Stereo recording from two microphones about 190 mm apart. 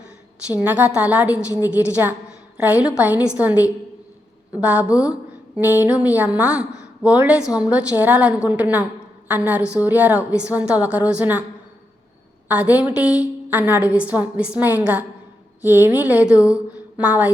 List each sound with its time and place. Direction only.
0.5 s a woman's voice: 10° right (ahead or behind)
12.5 s a woman's voice: 10° right (ahead or behind)